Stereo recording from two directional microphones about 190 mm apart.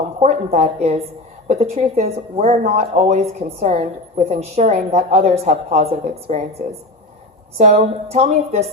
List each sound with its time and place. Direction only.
0.2 s a woman's voice: 35° right (ahead or behind)
7.6 s a woman's voice: 40° right (ahead or behind)